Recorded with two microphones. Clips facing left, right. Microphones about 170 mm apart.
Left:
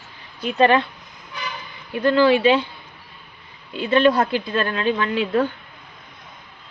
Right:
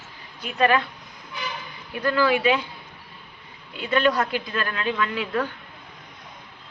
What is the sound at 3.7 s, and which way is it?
A woman's voice, 25° left (ahead or behind).